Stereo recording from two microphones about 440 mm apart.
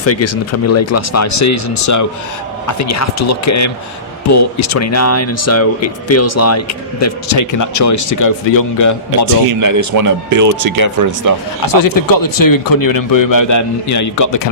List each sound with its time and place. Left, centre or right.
0.0 s speech: left
9.6 s speech: right
11.6 s speech: left